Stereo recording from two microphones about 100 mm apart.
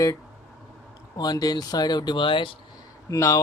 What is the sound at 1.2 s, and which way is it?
Speech, 40° left (ahead or behind).